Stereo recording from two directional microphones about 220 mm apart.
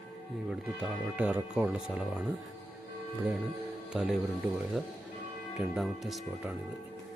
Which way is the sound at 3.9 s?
Centre (ahead or behind).